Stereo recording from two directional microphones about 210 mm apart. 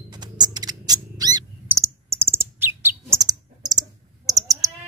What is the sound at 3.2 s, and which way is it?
Clicking, 20° right (ahead or behind).